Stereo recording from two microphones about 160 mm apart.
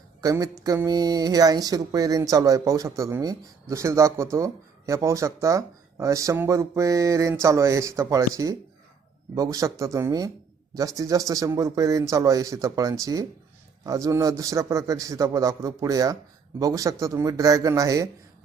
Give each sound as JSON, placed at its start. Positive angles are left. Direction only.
{"t": 0.2, "sound": "speech", "side_deg": -20}